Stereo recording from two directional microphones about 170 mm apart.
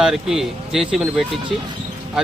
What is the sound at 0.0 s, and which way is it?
Speech, 5° right (ahead or behind).